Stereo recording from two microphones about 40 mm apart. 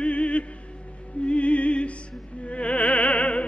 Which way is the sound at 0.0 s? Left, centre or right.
Left.